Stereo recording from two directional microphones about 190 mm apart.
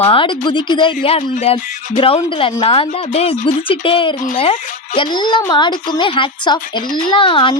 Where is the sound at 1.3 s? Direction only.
40° left (ahead or behind).